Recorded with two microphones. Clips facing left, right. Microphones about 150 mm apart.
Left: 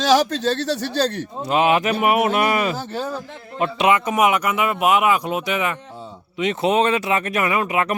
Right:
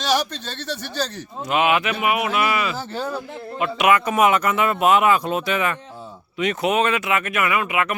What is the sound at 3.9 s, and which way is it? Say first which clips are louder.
Speech: right 1 dB; 20° left (ahead or behind).